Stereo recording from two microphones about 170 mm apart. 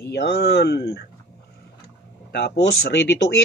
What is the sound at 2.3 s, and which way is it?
Speech, 90° left.